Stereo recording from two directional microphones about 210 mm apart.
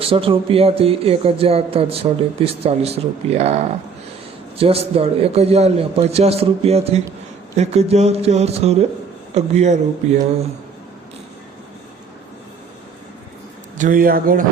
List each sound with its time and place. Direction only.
0.0 s speech: 25° right (ahead or behind)
13.7 s speech: 40° right (ahead or behind)